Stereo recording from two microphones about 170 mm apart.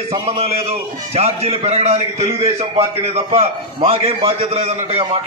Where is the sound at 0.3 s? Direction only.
40° right (ahead or behind).